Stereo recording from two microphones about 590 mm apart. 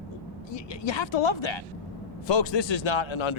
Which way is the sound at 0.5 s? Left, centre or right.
Left.